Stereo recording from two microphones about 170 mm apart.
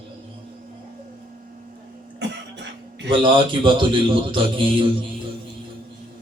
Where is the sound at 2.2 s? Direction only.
90° right.